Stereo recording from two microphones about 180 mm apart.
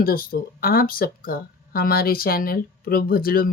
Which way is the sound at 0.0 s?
55° left (ahead or behind).